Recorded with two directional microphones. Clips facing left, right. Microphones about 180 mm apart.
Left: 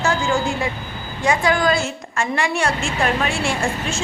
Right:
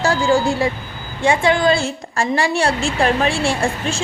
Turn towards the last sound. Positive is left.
turn(degrees=-30)  # may be behind; listen again after turning